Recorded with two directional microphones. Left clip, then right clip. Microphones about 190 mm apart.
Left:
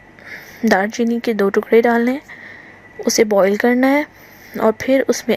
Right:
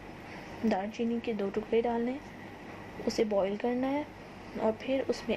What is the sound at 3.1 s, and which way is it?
A woman's voice, 55° left (ahead or behind).